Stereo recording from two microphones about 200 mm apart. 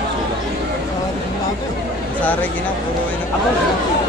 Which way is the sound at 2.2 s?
10° left (ahead or behind).